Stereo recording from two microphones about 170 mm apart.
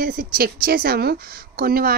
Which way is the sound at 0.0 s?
55° right (ahead or behind).